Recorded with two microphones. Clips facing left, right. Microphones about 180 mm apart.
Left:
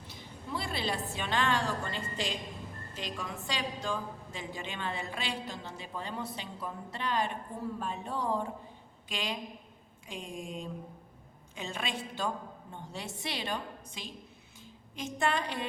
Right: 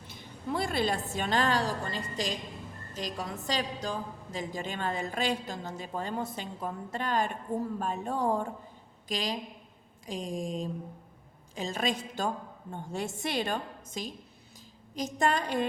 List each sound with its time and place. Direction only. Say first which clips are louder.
0.1 s a woman's voice: right 5 dB; 50° right (ahead or behind)